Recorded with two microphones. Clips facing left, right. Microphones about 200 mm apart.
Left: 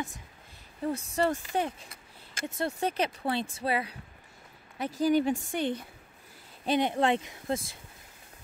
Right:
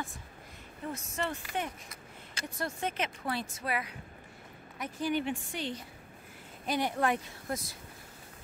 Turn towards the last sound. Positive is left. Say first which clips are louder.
# left 5 dB
turn(degrees=25)  # may be behind; listen again after turning